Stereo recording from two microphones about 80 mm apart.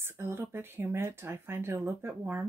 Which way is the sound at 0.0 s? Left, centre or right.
Right.